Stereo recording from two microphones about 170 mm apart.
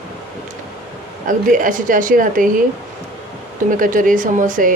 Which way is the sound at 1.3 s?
50° right (ahead or behind).